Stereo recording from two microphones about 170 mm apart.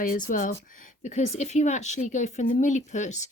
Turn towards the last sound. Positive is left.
turn(degrees=45)  # may be behind; listen again after turning